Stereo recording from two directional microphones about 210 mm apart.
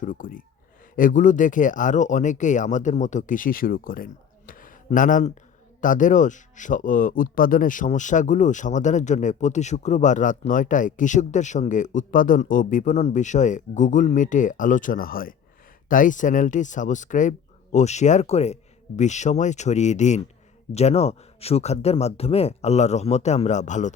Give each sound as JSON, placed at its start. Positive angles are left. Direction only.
{"t": 0.0, "sound": "speech", "side_deg": 40}